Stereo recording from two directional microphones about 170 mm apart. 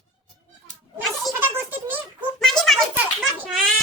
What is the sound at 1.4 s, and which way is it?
Music, 10° right (ahead or behind).